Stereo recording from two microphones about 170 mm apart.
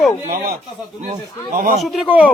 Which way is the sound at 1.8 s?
Centre (ahead or behind).